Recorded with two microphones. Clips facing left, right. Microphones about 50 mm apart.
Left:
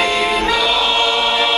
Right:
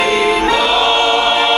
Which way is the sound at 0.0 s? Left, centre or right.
Right.